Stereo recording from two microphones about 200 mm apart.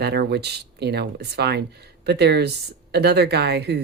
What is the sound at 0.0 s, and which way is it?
Speech, 55° right (ahead or behind).